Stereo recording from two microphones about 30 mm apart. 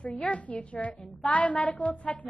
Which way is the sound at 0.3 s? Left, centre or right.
Left.